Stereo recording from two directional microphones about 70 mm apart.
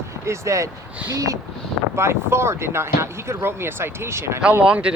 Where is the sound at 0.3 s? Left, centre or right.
Right.